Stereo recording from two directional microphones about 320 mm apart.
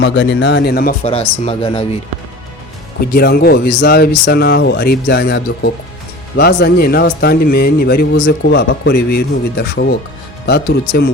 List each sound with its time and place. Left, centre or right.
0.0 s speech: left; by 2.0 s centre
3.1 s speech: left